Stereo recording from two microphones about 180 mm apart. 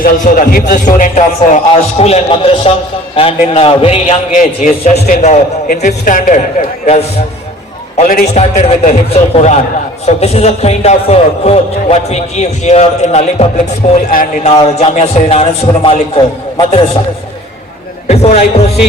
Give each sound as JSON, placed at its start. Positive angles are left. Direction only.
{"t": 0.0, "sound": "a man's voice", "side_deg": 50}
{"t": 14.1, "sound": "a man's voice", "side_deg": 50}
{"t": 14.5, "sound": "a man's voice", "side_deg": 35}
{"t": 18.1, "sound": "a man's voice", "side_deg": 35}